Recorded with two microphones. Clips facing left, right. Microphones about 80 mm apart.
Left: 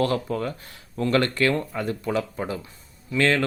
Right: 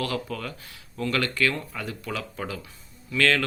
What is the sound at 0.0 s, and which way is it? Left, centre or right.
Speech, left.